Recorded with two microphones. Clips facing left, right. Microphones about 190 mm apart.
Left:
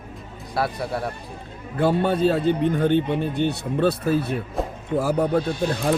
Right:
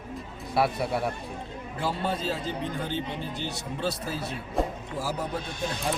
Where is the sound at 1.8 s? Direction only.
60° left (ahead or behind).